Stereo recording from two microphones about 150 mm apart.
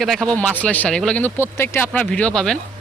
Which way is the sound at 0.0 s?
Centre (ahead or behind).